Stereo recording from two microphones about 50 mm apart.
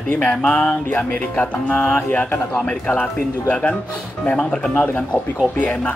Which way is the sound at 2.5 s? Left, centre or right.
Left.